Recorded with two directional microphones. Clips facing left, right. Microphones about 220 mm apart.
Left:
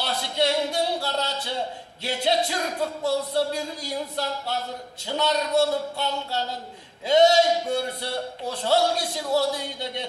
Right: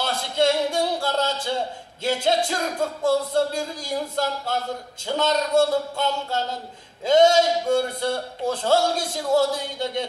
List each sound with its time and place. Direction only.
0.0 s a sound: 50° right (ahead or behind)
2.0 s a man's voice: 45° right (ahead or behind)
5.0 s a man's voice: 50° right (ahead or behind)